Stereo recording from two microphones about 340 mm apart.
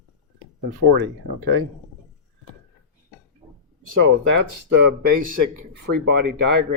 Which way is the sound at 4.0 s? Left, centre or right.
Right.